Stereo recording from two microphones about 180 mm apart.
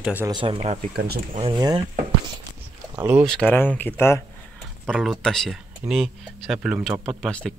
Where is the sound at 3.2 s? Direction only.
5° left (ahead or behind).